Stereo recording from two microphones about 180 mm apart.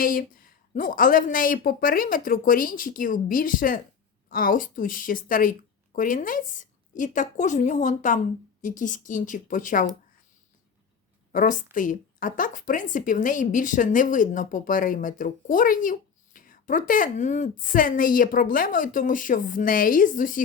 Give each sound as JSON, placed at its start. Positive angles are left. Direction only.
{"t": 0.0, "sound": "a woman's voice", "side_deg": 50}
{"t": 11.3, "sound": "a woman's voice", "side_deg": 45}